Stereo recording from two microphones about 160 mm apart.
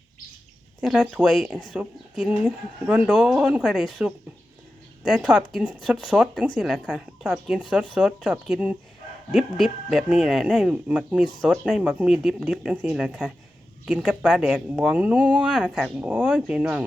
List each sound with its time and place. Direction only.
0.8 s speech: 5° right (ahead or behind)